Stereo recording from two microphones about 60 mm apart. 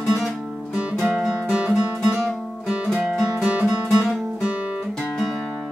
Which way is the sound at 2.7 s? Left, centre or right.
Centre.